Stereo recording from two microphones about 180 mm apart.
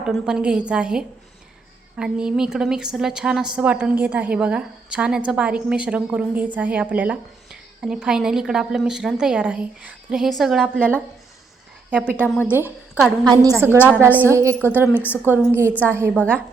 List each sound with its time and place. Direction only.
0.0 s a woman's voice: 5° right (ahead or behind)
11.9 s a woman's voice: 10° right (ahead or behind)
12.1 s a woman's voice: 10° left (ahead or behind)
12.5 s a woman's voice: 10° right (ahead or behind)
13.2 s a woman's voice: 20° right (ahead or behind)
13.8 s a woman's voice: 10° right (ahead or behind)
16.1 s a woman's voice: 5° left (ahead or behind)